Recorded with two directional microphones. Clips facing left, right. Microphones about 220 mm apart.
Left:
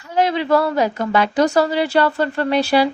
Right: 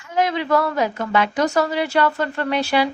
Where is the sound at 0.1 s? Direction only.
30° left (ahead or behind).